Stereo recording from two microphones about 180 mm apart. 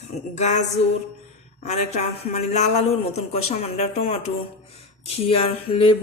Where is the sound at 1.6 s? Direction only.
40° left (ahead or behind).